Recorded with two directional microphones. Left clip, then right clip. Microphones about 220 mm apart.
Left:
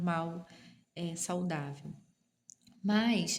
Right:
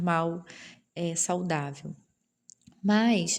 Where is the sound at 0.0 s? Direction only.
40° right (ahead or behind).